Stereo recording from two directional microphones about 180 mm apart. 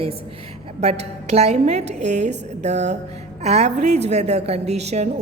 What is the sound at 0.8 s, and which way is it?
A woman's voice, 35° right (ahead or behind).